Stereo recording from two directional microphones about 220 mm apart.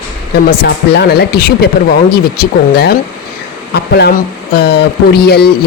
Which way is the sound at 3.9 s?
45° left (ahead or behind).